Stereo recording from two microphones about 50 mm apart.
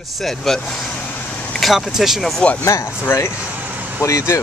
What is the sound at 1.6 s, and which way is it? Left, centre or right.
Speech, centre.